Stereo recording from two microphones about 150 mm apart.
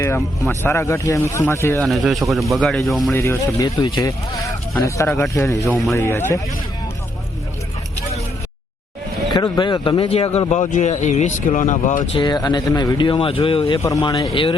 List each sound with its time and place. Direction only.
0.6 s speech: 20° left (ahead or behind)
1.8 s speech: centre (ahead or behind)
3.2 s speech: 20° left (ahead or behind)
9.3 s speech: 30° left (ahead or behind); by 12.0 s 55° left (ahead or behind)
12.1 s speech: 30° left (ahead or behind)
13.7 s speech: 20° left (ahead or behind)